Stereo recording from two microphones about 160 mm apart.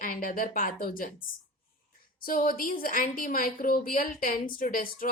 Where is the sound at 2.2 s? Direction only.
65° left (ahead or behind).